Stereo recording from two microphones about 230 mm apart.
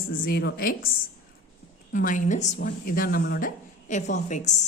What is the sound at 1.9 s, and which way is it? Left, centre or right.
A woman's voice, left.